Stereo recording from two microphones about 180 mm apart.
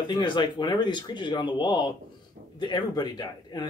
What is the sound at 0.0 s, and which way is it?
Speech, 25° left (ahead or behind).